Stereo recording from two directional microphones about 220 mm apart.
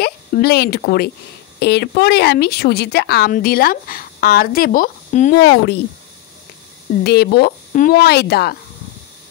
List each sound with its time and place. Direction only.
0.0 s a woman's voice: 45° left (ahead or behind)
6.9 s a woman's voice: 45° left (ahead or behind)